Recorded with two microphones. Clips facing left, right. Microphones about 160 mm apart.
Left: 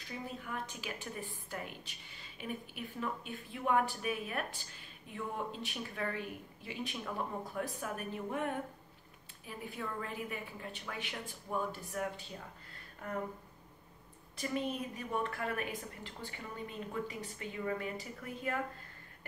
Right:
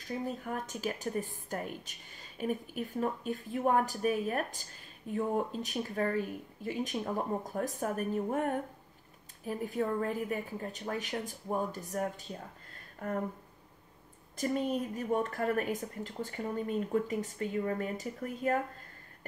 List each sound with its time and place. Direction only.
0.4 s a woman's voice: 45° right (ahead or behind)
14.3 s a woman's voice: 45° right (ahead or behind)